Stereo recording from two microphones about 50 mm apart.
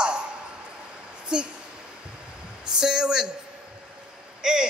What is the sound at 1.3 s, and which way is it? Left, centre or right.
Speech, centre.